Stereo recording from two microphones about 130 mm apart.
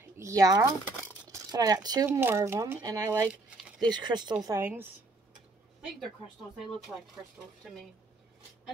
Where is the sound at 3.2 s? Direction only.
10° right (ahead or behind).